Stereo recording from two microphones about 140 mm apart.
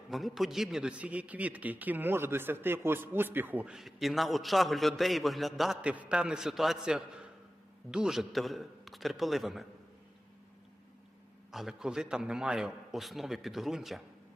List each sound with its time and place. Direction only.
0.1 s a man's voice: centre (ahead or behind)
11.5 s a man's voice: 5° right (ahead or behind)